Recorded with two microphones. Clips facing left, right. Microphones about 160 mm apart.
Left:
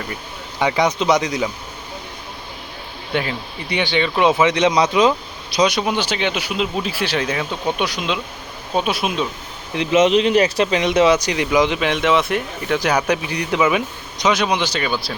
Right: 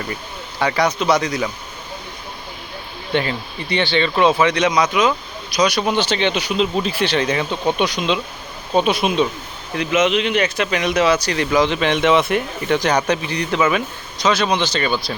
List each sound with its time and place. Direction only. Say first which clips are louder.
0.6 s speech: left 1 dB; 20° left (ahead or behind)
3.1 s speech: right 2 dB; 5° left (ahead or behind)
4.7 s speech: left 2 dB; 30° left (ahead or behind)
5.8 s speech: right 2 dB; 10° left (ahead or behind)
9.7 s speech: left 3 dB; 30° left (ahead or behind); by 14.9 s 10° left (ahead or behind)